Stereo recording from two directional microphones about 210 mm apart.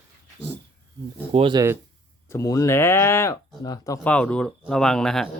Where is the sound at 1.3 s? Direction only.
20° right (ahead or behind).